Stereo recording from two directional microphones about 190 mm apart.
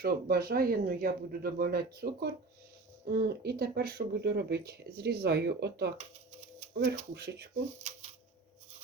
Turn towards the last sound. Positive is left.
turn(degrees=-35)  # may be behind; listen again after turning